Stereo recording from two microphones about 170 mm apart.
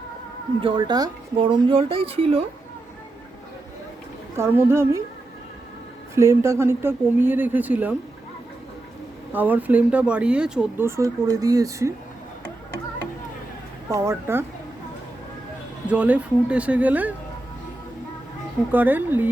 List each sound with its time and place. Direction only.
0.6 s speech: 30° right (ahead or behind)
4.4 s speech: 15° right (ahead or behind)
6.1 s speech: 15° right (ahead or behind)
9.3 s speech: 10° right (ahead or behind)
13.9 s speech: 15° right (ahead or behind)
15.9 s speech: 10° right (ahead or behind)
18.7 s speech: 10° right (ahead or behind)